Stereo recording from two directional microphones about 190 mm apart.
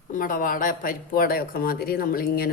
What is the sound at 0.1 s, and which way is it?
Speech, 45° left (ahead or behind).